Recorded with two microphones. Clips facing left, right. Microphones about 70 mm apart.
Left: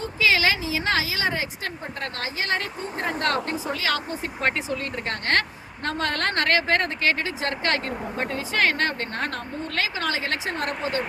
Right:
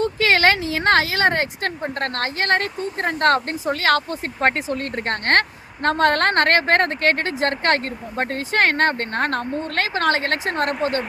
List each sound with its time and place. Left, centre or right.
0.0 s speech: right